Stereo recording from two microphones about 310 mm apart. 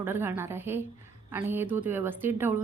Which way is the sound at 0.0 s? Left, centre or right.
Centre.